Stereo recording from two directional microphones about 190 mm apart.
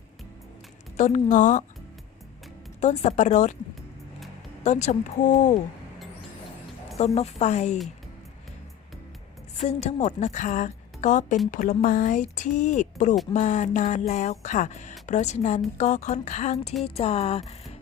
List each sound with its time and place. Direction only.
0.9 s a woman's voice: 40° left (ahead or behind)
2.8 s a woman's voice: 35° left (ahead or behind)
4.6 s a woman's voice: 40° left (ahead or behind)
7.0 s a woman's voice: 35° left (ahead or behind)
9.6 s a woman's voice: 35° left (ahead or behind)